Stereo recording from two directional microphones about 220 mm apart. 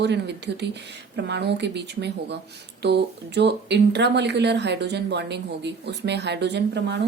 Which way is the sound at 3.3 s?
50° right (ahead or behind).